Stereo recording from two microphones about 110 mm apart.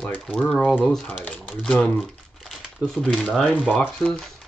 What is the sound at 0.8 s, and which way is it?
Speech, 5° left (ahead or behind).